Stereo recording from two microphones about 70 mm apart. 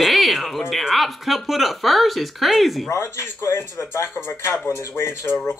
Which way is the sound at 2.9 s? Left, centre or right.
Left.